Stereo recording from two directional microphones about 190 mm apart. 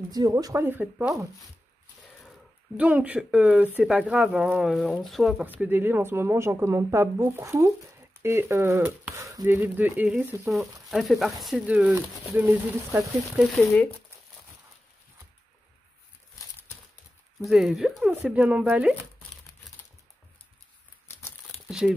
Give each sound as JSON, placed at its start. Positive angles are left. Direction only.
{"t": 0.1, "sound": "speech", "side_deg": -20}
{"t": 2.8, "sound": "speech", "side_deg": -10}
{"t": 13.7, "sound": "speech", "side_deg": 10}
{"t": 17.4, "sound": "speech", "side_deg": 0}
{"t": 21.6, "sound": "crumpling", "side_deg": -5}